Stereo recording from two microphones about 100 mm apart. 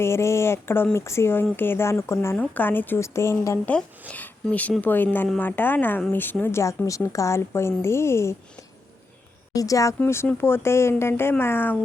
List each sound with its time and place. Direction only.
0.0 s a woman's voice: 25° left (ahead or behind)
2.4 s a woman's voice: 15° left (ahead or behind)
4.8 s a woman's voice: 20° left (ahead or behind)
9.6 s a woman's voice: 35° left (ahead or behind)